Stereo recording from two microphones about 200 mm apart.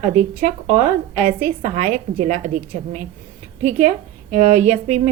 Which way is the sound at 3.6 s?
40° right (ahead or behind).